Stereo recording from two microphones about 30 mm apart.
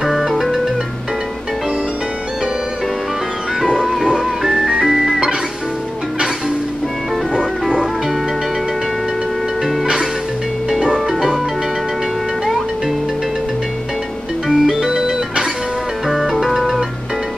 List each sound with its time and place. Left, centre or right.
0.0 s music: centre
3.6 s music: centre
4.5 s ice cream truck: centre
10.9 s music: centre
14.5 s music: centre
16.1 s music: centre